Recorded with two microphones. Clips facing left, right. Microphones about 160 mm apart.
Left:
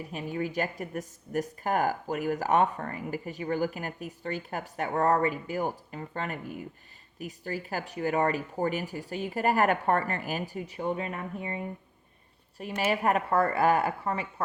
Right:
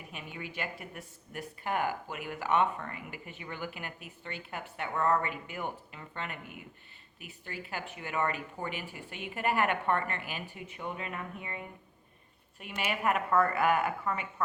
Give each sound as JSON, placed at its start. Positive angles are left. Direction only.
{"t": 0.0, "sound": "speech", "side_deg": 35}